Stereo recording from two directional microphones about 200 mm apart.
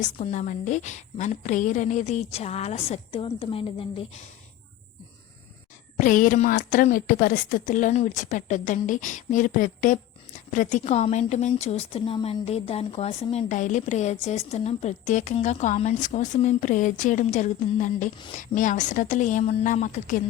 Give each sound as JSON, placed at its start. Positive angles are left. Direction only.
{"t": 0.2, "sound": "a woman's voice", "side_deg": 35}
{"t": 6.0, "sound": "a woman's voice", "side_deg": 40}